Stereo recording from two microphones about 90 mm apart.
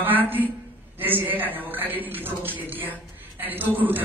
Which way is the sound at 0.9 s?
20° right (ahead or behind).